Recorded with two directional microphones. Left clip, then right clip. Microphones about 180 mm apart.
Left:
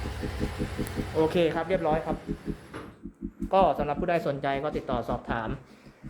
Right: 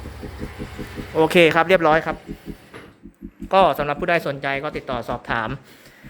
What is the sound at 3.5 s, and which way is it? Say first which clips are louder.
A man's voice: right 7 dB; 15° right (ahead or behind).